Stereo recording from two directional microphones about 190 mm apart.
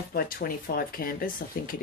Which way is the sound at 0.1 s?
50° left (ahead or behind).